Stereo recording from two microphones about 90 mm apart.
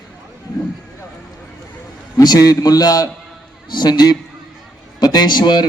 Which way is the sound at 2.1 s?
45° left (ahead or behind).